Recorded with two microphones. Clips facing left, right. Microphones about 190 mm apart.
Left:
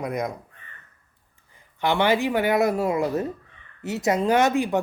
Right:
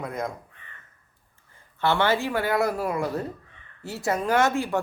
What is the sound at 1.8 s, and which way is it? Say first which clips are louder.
Speech: left 2 dB; 15° left (ahead or behind).